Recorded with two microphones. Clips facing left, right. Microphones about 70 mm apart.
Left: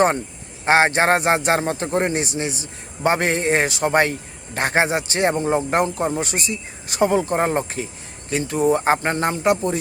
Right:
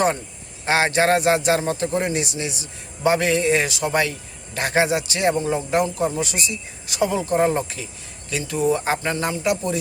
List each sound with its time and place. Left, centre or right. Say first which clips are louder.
0.6 s a man's voice: left 3 dB; left